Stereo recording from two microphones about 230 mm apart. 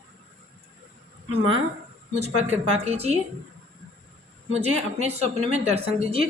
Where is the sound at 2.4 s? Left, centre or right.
Right.